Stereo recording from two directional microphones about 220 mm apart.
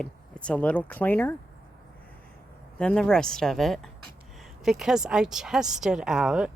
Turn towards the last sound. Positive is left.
turn(degrees=-5)  # may be behind; listen again after turning